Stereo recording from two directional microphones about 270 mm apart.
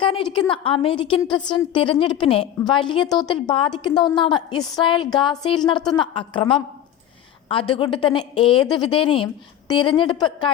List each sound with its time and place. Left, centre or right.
0.3 s a woman's voice: centre